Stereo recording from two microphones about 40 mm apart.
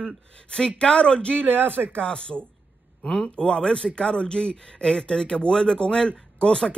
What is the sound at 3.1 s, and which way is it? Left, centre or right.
A man's voice, centre.